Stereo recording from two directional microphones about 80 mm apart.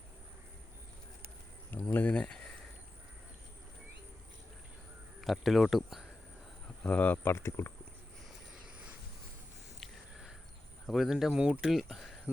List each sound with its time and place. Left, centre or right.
1.9 s speech: centre
5.2 s speech: centre
6.8 s speech: centre
9.8 s a sound: centre
10.8 s speech: centre
11.6 s speech: centre